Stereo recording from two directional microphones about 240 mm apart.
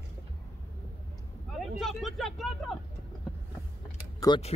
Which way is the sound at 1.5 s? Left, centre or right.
Centre.